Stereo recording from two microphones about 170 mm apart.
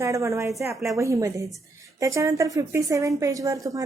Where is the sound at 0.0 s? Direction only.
15° right (ahead or behind).